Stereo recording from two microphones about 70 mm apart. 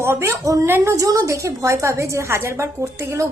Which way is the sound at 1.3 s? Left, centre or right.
Right.